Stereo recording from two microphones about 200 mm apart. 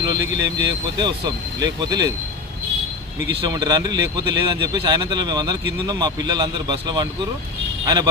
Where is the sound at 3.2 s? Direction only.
20° right (ahead or behind).